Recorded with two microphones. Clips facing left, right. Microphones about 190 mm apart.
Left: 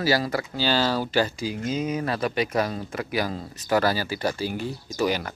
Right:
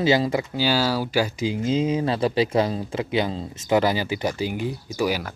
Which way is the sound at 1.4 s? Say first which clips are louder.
Right 5 dB; 25° right (ahead or behind).